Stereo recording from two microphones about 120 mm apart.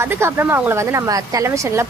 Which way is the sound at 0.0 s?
20° right (ahead or behind).